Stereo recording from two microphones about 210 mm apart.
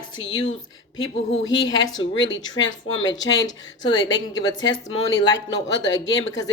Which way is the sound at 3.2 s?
20° left (ahead or behind).